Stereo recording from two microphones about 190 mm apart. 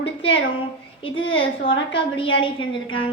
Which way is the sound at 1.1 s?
85° left.